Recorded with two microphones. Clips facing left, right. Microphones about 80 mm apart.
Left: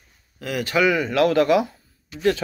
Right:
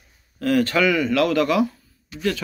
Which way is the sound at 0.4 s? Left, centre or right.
Centre.